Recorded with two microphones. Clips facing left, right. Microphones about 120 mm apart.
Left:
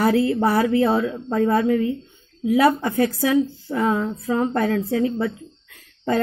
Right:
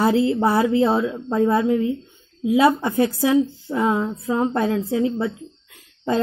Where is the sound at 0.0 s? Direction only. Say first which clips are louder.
Even; 25° right (ahead or behind).